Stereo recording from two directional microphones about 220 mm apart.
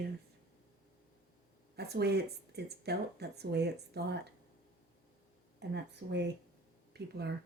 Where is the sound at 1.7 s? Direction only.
45° right (ahead or behind).